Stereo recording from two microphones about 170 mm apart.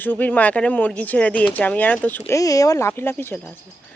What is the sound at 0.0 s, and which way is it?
Speech, 10° left (ahead or behind).